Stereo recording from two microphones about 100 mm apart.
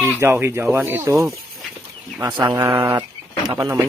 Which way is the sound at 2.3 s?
40° right (ahead or behind).